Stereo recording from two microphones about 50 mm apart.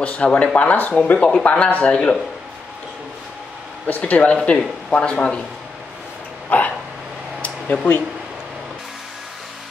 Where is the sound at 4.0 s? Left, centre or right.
Left.